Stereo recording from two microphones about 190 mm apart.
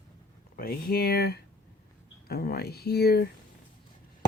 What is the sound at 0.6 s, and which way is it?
Speech, 55° left (ahead or behind).